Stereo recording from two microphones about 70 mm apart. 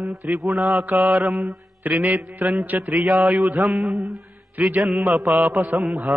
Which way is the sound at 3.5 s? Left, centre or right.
Centre.